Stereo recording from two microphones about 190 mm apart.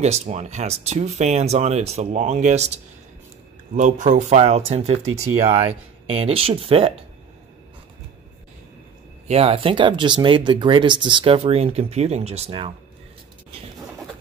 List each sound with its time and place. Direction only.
0.0 s speech: 35° right (ahead or behind)
3.7 s speech: 40° right (ahead or behind)
9.3 s speech: 30° right (ahead or behind)